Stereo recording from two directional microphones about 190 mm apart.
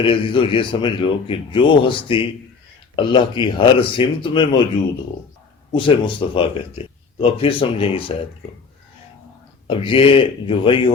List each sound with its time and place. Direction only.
0.0 s speech: 25° left (ahead or behind)
5.7 s speech: 25° left (ahead or behind)
9.6 s speech: 25° left (ahead or behind)